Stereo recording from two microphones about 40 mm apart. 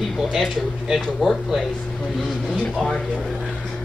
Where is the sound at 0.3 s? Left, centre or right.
Centre.